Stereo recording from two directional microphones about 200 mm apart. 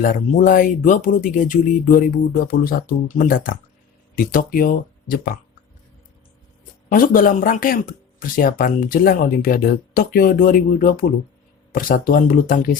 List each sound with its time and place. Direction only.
0.0 s speech: 40° left (ahead or behind)
6.9 s speech: 45° left (ahead or behind)